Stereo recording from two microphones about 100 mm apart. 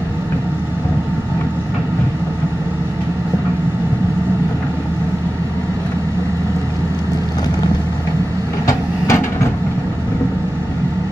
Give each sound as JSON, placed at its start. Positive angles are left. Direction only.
{"t": 8.6, "sound": "vehicle", "side_deg": 30}